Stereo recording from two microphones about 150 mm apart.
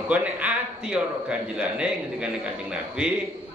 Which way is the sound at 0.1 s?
10° right (ahead or behind).